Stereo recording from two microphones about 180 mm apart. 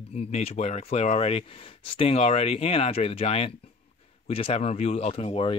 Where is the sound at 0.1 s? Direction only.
35° left (ahead or behind).